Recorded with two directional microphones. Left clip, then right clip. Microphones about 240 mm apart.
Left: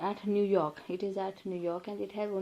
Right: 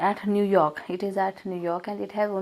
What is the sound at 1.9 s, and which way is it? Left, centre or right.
Speech, right.